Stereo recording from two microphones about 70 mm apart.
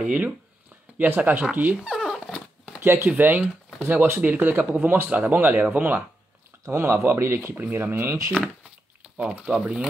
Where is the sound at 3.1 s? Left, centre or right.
Right.